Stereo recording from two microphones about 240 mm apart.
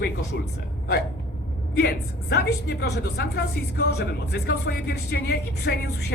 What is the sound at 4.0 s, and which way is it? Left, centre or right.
A man's voice, left.